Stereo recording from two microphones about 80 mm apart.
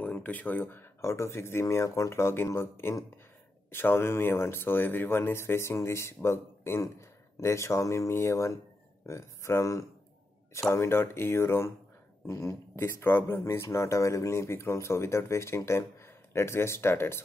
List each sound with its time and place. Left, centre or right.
0.0 s speech: left